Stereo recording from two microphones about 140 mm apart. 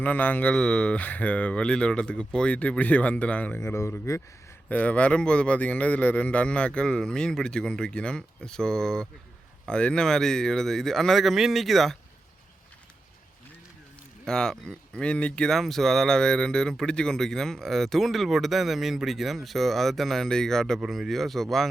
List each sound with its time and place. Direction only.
0.0 s a man's voice: 10° left (ahead or behind)
4.7 s a man's voice: 10° left (ahead or behind)
14.3 s speech: 5° left (ahead or behind)